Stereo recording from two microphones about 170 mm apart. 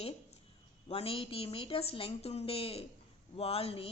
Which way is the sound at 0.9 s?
35° left (ahead or behind).